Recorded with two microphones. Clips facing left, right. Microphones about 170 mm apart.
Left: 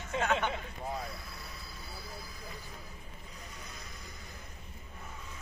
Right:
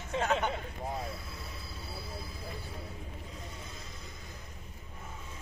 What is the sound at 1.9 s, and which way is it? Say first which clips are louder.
Vehicle: right 4 dB; 30° right (ahead or behind).